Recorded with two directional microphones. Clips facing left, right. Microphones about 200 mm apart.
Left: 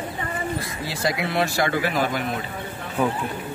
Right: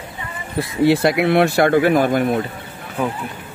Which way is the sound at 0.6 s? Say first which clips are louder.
Right 14 dB; 65° right (ahead or behind).